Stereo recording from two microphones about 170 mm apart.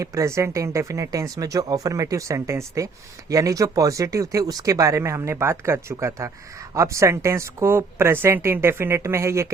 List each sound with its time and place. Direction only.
0.0 s speech: 20° right (ahead or behind)